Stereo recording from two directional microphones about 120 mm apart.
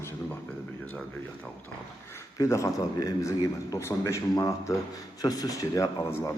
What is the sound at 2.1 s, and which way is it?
A man's voice, 25° left (ahead or behind).